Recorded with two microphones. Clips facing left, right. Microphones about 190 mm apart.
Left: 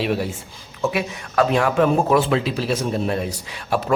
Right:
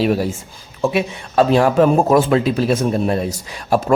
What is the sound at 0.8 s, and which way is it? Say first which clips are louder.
A man's voice: right 4 dB; 30° right (ahead or behind).